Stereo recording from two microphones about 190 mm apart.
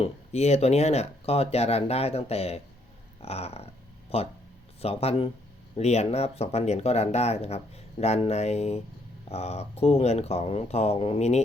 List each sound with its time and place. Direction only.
0.0 s speech: 35° left (ahead or behind)